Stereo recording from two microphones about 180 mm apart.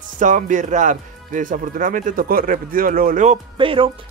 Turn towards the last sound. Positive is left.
turn(degrees=-30)  # may be behind; listen again after turning